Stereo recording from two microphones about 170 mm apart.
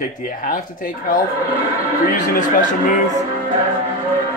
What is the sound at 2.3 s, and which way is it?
Speech, 50° left (ahead or behind).